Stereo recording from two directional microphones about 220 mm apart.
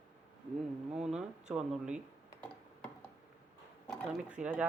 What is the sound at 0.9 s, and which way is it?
Speech, 5° right (ahead or behind).